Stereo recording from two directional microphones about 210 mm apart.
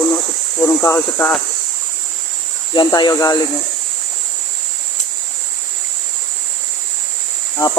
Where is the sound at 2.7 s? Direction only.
20° left (ahead or behind).